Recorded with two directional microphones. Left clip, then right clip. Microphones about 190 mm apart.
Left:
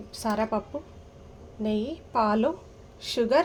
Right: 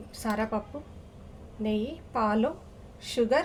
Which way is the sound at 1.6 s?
20° left (ahead or behind).